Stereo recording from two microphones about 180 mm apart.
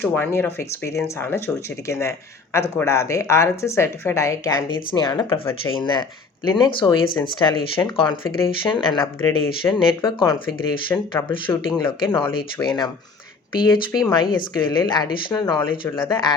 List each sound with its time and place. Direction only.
0.0 s speech: 10° left (ahead or behind)
11.8 s speech: 25° left (ahead or behind)